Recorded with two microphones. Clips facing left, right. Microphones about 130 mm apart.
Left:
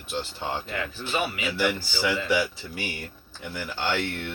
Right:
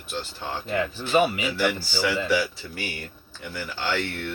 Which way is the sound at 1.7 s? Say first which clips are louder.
Right 1 dB; 15° left (ahead or behind).